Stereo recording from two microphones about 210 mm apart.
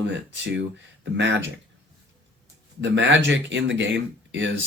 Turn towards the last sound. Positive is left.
turn(degrees=-60)  # may be behind; listen again after turning